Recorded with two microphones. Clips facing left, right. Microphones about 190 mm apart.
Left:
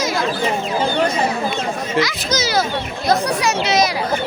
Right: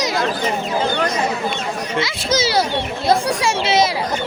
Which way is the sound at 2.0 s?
30° right (ahead or behind).